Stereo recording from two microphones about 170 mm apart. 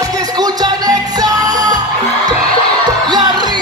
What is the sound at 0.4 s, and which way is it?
Music, 20° right (ahead or behind).